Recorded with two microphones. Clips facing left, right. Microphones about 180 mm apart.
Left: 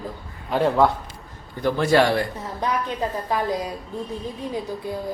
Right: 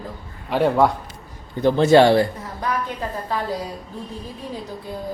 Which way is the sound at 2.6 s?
15° left (ahead or behind).